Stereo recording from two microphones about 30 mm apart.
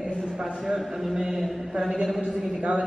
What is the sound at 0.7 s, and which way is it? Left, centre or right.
Speech, centre.